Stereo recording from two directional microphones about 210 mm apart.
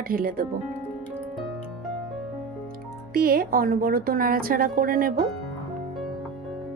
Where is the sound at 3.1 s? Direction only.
45° right (ahead or behind).